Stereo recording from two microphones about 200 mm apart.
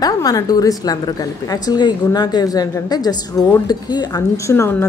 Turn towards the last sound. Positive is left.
turn(degrees=10)  # may be behind; listen again after turning